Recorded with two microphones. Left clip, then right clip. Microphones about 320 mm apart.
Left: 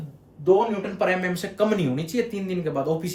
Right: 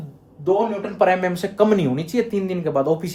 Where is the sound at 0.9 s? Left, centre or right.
Centre.